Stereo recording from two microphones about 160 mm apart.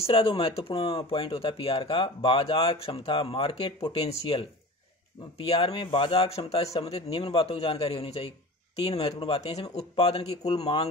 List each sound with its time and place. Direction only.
0.0 s speech: 35° left (ahead or behind)